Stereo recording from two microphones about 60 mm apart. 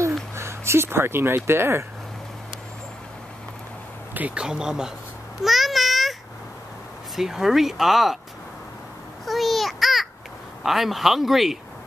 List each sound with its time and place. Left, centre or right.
0.4 s speech: right
4.1 s speech: right
4.4 s speech: centre
5.4 s babbling: centre
7.2 s speech: centre
9.2 s babbling: centre
10.6 s speech: centre